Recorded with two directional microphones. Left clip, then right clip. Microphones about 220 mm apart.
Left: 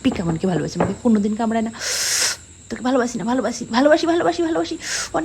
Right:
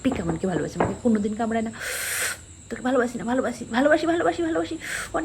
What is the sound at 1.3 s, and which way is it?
Speech, 35° right (ahead or behind).